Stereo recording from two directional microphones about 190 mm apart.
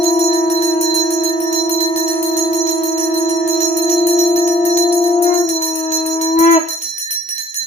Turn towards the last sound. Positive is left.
turn(degrees=40)  # may be behind; listen again after turning